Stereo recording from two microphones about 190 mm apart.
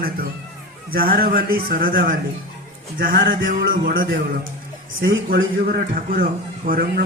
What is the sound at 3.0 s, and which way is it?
A man's voice, 50° right (ahead or behind).